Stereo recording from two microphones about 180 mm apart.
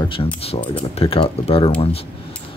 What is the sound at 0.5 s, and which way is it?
Speech, 30° left (ahead or behind).